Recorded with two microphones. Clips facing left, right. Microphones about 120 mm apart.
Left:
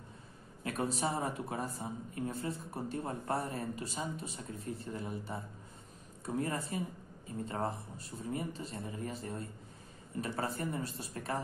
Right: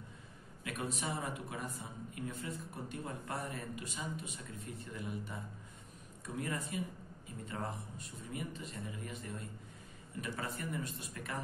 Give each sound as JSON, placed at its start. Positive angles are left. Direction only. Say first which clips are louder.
{"t": 0.7, "sound": "speech", "louder": "left 5 dB", "side_deg": 35}